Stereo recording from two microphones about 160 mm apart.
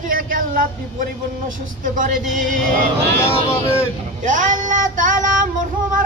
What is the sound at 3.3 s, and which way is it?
Speech, 15° left (ahead or behind).